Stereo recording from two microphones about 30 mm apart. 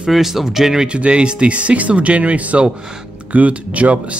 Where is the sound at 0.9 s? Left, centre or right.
Right.